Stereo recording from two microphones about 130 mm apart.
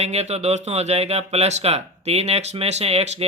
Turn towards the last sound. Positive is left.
turn(degrees=-50)  # may be behind; listen again after turning